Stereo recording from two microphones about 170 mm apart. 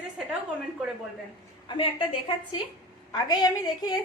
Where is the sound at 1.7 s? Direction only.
30° left (ahead or behind).